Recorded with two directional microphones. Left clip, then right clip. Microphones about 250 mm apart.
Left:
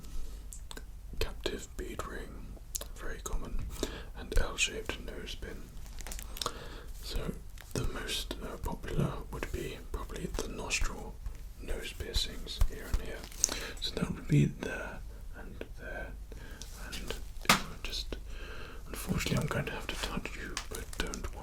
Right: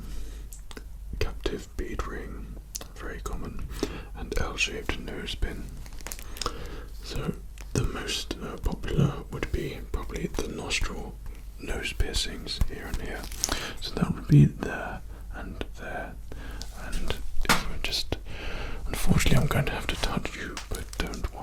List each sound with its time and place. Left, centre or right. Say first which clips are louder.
1.2 s whispering: right 5 dB; right
5.0 s speech: right 8 dB; right
6.4 s whispering: right 4 dB; right
11.6 s speech: right 8 dB; right
13.4 s whispering: right 3 dB; right
15.4 s whispering: right 8 dB; right
17.8 s whispering: right 9 dB; right
21.0 s whispering: right 4 dB; right